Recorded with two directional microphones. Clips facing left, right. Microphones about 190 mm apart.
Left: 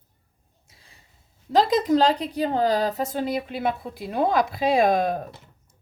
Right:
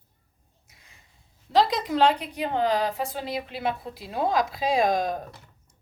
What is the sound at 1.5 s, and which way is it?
A woman's voice, 40° left (ahead or behind).